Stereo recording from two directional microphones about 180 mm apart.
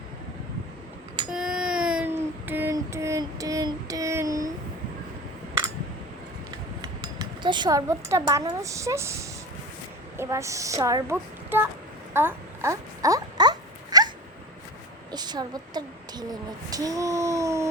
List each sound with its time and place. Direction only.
1.3 s child singing: 5° right (ahead or behind)
7.4 s speech: 25° right (ahead or behind)
12.1 s a sound: 15° right (ahead or behind)
15.1 s speech: 25° right (ahead or behind)